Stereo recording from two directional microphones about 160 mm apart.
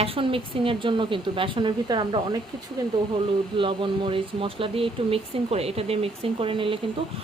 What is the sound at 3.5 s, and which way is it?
Speech, 30° right (ahead or behind).